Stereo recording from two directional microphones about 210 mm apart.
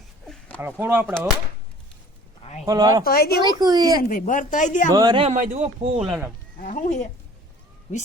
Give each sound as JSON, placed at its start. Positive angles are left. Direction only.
{"t": 0.3, "sound": "a sound", "side_deg": 5}
{"t": 0.6, "sound": "speech", "side_deg": -10}
{"t": 2.4, "sound": "a sound", "side_deg": 30}
{"t": 2.6, "sound": "speech", "side_deg": -20}
{"t": 3.0, "sound": "speech", "side_deg": 45}
{"t": 3.6, "sound": "speech", "side_deg": -20}
{"t": 4.1, "sound": "speech", "side_deg": 40}
{"t": 4.9, "sound": "speech", "side_deg": -20}
{"t": 6.0, "sound": "speech", "side_deg": -5}
{"t": 6.6, "sound": "speech", "side_deg": 35}